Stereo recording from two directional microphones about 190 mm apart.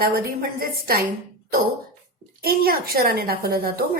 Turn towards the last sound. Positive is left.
turn(degrees=-50)  # may be behind; listen again after turning